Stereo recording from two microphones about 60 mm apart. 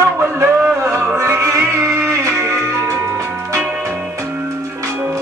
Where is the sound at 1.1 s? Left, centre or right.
Right.